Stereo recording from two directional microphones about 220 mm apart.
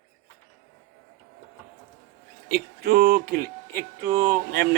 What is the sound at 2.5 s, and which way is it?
Speech, 45° right (ahead or behind).